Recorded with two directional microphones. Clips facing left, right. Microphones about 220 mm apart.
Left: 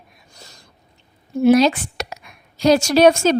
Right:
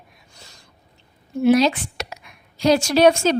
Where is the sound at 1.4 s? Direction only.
45° left (ahead or behind).